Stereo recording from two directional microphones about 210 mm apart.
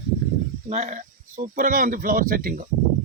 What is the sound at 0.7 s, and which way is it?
Speech, 35° right (ahead or behind).